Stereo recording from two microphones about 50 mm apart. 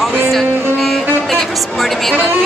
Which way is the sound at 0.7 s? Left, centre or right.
Centre.